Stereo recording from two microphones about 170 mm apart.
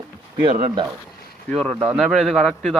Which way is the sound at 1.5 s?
5° left (ahead or behind).